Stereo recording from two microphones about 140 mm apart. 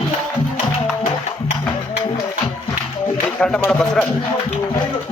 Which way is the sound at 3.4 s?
5° left (ahead or behind).